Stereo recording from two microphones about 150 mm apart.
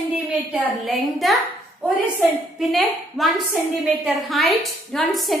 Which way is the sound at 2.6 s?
Centre (ahead or behind).